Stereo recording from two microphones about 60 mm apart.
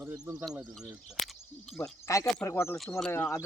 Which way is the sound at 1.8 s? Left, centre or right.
Left.